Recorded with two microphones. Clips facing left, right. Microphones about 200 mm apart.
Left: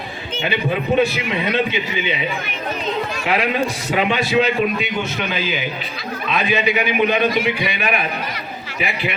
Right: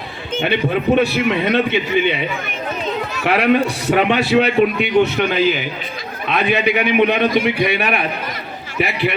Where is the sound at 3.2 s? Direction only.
60° right (ahead or behind).